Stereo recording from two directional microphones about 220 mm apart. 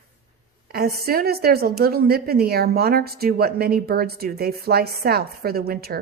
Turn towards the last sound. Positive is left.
turn(degrees=-45)  # may be behind; listen again after turning